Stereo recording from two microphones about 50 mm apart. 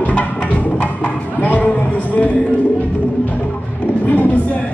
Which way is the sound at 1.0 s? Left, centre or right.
Left.